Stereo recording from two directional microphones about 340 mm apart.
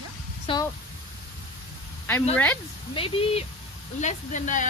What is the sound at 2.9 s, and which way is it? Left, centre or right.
A woman's voice, centre.